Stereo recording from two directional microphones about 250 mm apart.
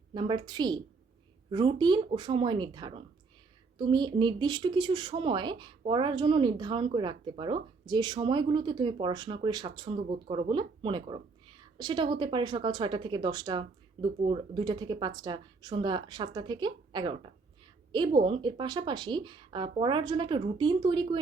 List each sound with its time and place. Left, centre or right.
0.1 s a woman's voice: centre